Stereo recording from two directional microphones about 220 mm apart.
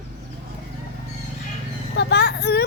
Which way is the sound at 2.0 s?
50° left (ahead or behind).